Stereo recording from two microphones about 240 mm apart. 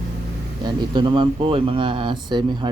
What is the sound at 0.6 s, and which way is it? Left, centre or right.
A man's voice, centre.